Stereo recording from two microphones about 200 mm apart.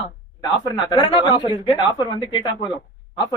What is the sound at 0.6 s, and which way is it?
Speech, 20° left (ahead or behind).